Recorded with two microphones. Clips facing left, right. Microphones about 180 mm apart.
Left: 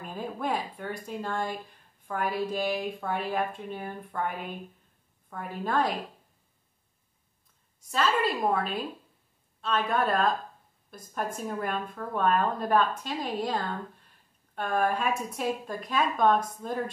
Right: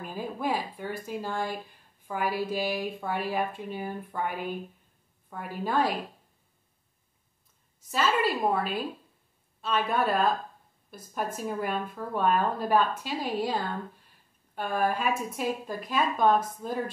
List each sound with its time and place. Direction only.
0.0 s a woman's voice: 5° right (ahead or behind)
7.9 s a woman's voice: 5° right (ahead or behind)